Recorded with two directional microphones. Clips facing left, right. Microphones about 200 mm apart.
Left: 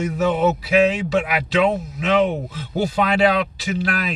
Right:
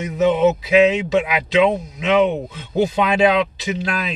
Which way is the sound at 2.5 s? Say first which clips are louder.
Right 3 dB; 20° right (ahead or behind).